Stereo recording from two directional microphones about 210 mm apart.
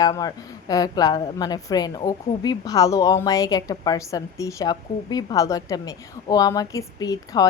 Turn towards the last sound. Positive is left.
turn(degrees=15)  # may be behind; listen again after turning